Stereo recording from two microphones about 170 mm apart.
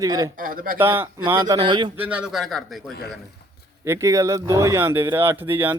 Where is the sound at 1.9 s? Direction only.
10° right (ahead or behind).